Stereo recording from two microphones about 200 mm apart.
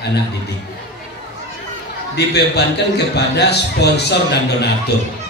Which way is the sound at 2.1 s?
55° left (ahead or behind).